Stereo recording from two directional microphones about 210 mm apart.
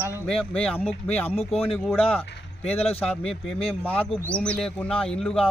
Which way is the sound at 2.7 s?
30° left (ahead or behind).